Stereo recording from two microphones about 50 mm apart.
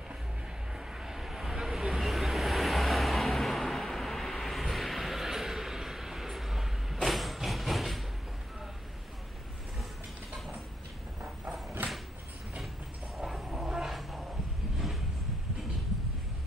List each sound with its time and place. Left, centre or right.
0.7 s vehicle: centre
11.8 s a sound: right
13.2 s train: centre